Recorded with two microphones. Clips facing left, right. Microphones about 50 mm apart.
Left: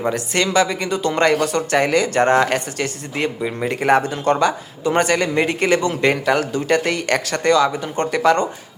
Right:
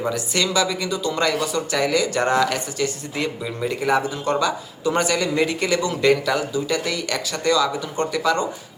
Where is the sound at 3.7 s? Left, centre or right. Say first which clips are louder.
Left 5 dB; left.